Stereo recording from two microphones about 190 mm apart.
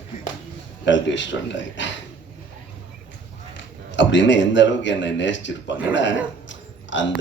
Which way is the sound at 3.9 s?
75° left (ahead or behind).